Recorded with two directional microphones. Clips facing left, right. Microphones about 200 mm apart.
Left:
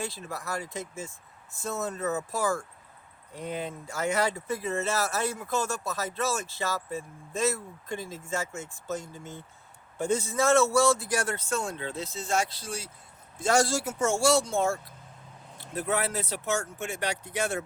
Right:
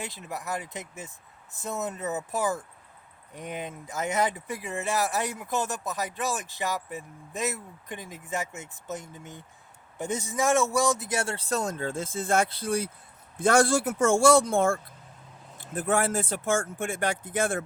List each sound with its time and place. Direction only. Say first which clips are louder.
0.0 s a man's voice: left 1 dB; 20° right (ahead or behind); by 17.6 s 50° right (ahead or behind)